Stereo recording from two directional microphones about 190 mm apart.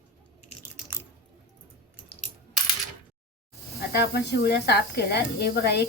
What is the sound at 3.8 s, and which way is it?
Speech, 60° left (ahead or behind).